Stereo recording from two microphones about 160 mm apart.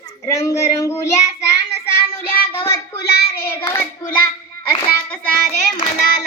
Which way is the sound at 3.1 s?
80° left.